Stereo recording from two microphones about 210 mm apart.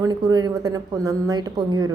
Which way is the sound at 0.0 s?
20° right (ahead or behind).